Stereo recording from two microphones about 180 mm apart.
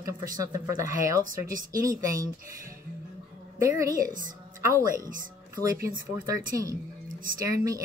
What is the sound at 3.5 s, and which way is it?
Speech, 15° right (ahead or behind).